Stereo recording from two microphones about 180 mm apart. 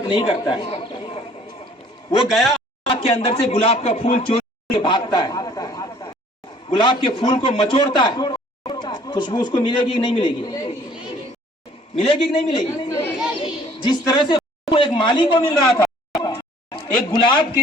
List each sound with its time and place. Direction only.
0.1 s a man's voice: 30° left (ahead or behind)
2.2 s speech: centre (ahead or behind)
2.8 s a man's voice: 30° left (ahead or behind)
11.9 s speech: 30° left (ahead or behind)
15.8 s a sound: 20° left (ahead or behind)